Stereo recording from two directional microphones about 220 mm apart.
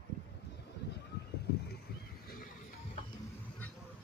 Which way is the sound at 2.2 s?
40° left (ahead or behind).